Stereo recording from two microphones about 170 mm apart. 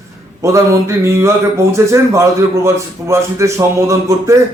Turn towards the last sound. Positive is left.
turn(degrees=-15)  # may be behind; listen again after turning